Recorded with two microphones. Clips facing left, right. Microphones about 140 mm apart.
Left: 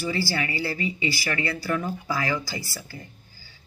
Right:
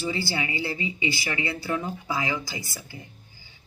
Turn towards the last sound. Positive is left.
turn(degrees=-20)  # may be behind; listen again after turning